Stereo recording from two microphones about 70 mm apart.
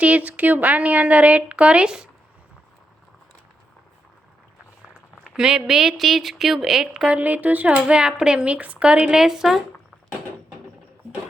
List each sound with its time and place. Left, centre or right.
0.0 s speech: right
5.3 s speech: centre
7.2 s speech: right; by 9.6 s centre